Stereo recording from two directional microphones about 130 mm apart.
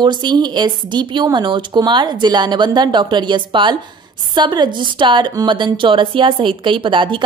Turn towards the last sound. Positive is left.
turn(degrees=-40)  # may be behind; listen again after turning